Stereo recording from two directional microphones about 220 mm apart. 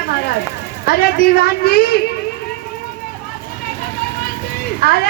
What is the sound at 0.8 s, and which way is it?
A woman's voice, 45° left (ahead or behind).